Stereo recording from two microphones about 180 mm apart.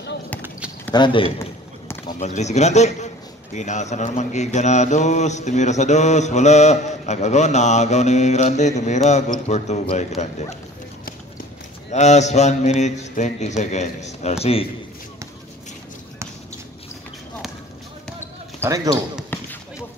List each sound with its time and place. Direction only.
0.9 s a man's voice: 25° left (ahead or behind)
1.4 s a sound: 15° left (ahead or behind)
2.1 s a man's voice: 40° left (ahead or behind)
11.9 s a man's voice: 40° left (ahead or behind)
18.6 s speech: 20° right (ahead or behind)
19.3 s basketball bounce: 10° left (ahead or behind)